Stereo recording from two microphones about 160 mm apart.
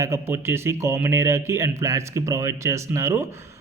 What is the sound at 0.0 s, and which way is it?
A man's voice, 15° right (ahead or behind).